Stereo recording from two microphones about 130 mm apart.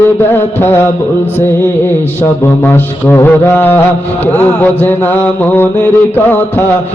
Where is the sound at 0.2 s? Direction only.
15° left (ahead or behind).